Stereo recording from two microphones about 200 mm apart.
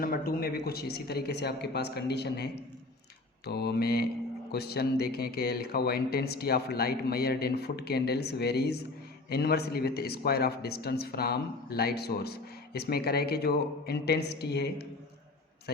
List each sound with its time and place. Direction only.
0.0 s speech: 45° left (ahead or behind)